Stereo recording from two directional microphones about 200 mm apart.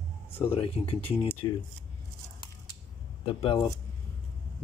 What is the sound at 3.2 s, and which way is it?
Speech, 25° left (ahead or behind).